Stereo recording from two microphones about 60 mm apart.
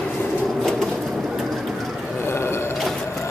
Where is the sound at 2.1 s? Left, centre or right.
Left.